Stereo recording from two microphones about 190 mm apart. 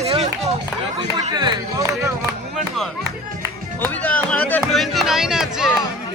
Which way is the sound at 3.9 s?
10° left (ahead or behind).